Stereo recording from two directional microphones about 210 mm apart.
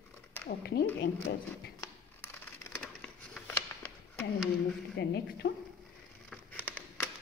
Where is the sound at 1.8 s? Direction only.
10° left (ahead or behind).